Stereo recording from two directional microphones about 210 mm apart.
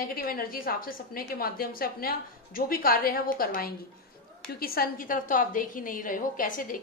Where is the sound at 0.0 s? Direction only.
45° left (ahead or behind).